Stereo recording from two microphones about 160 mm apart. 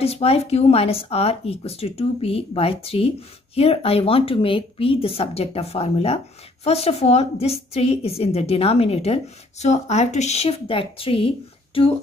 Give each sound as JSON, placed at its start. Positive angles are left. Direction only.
{"t": 0.0, "sound": "a woman's voice", "side_deg": 40}